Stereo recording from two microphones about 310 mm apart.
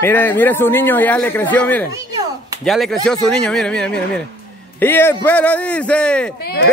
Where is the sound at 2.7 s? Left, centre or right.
Centre.